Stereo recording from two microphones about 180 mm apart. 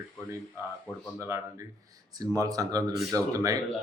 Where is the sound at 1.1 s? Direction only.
15° right (ahead or behind).